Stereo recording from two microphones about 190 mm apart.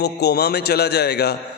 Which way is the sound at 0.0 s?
60° left (ahead or behind).